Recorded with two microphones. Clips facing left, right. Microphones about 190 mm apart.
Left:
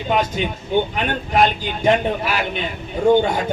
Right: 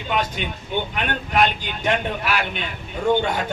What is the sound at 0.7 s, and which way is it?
A man's voice, 40° left (ahead or behind).